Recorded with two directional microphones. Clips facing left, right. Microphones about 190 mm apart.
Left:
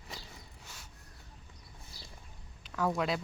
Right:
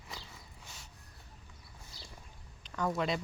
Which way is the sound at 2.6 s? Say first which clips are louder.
Left 2 dB; 5° left (ahead or behind).